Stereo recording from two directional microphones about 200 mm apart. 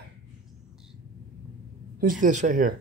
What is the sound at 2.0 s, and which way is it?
Speech, 40° right (ahead or behind).